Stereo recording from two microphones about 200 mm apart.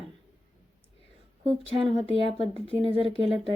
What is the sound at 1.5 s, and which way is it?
Speech, 25° right (ahead or behind).